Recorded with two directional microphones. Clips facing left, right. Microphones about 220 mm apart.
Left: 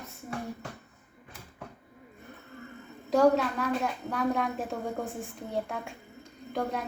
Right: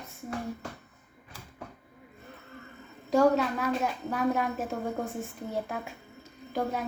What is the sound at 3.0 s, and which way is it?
A woman's voice, centre (ahead or behind).